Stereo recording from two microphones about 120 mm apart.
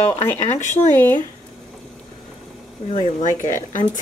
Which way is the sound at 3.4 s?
90° left.